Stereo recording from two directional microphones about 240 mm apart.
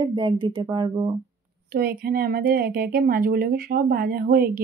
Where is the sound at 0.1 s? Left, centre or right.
Centre.